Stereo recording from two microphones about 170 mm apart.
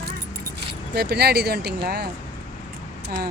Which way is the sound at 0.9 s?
70° right (ahead or behind).